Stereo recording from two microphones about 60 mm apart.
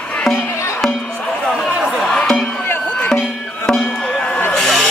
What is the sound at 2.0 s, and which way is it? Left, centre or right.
Music, centre.